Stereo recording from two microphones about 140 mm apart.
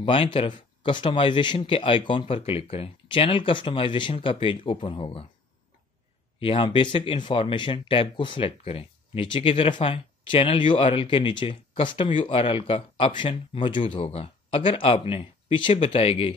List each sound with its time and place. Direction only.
0.0 s speech: 40° left (ahead or behind)
6.4 s speech: 40° left (ahead or behind)